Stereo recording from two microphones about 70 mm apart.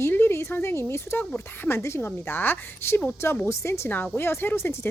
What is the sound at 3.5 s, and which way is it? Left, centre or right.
Speech, left.